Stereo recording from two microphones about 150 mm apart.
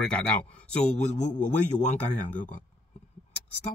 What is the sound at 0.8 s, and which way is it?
A man's voice, 50° left (ahead or behind).